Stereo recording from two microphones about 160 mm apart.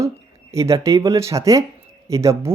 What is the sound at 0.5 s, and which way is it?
Speech, 20° right (ahead or behind).